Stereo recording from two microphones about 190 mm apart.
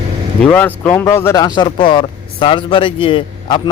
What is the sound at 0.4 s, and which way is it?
Speech, 10° left (ahead or behind).